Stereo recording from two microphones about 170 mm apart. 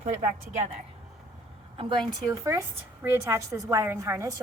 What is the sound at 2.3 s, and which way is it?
A woman's voice, 20° right (ahead or behind).